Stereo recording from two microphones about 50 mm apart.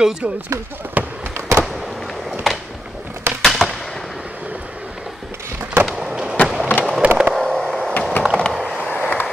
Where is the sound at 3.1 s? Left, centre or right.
Right.